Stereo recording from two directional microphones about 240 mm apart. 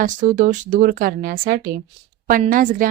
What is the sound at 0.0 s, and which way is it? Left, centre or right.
Speech, right.